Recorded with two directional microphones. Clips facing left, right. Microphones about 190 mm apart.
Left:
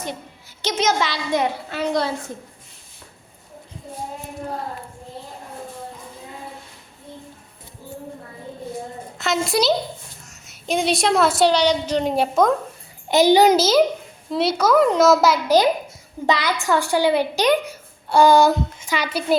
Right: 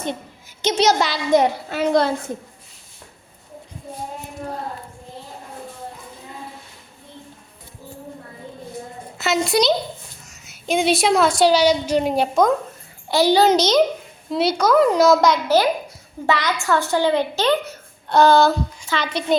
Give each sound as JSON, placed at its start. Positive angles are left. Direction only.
{"t": 0.8, "sound": "a child's voice", "side_deg": -40}
{"t": 9.1, "sound": "a woman's voice", "side_deg": -5}
{"t": 13.1, "sound": "a woman's voice", "side_deg": 20}
{"t": 13.6, "sound": "a woman's voice", "side_deg": 5}